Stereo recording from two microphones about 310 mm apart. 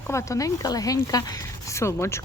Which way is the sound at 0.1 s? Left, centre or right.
Centre.